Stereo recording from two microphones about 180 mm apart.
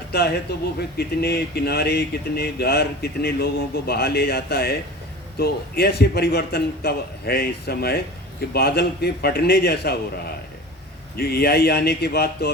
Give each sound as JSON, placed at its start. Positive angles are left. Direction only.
{"t": 0.8, "sound": "speech", "side_deg": 60}
{"t": 11.2, "sound": "speech", "side_deg": 60}